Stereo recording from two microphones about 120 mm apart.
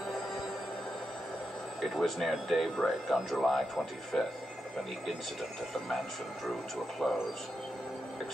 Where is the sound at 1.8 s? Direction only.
Centre (ahead or behind).